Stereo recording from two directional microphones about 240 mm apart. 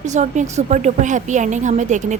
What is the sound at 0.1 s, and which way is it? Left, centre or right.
A woman's voice, right.